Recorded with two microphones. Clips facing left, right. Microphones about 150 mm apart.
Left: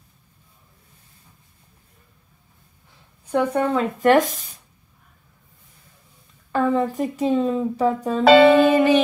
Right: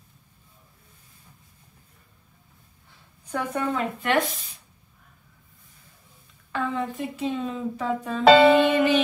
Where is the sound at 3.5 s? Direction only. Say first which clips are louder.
Left 6 dB; 35° left (ahead or behind).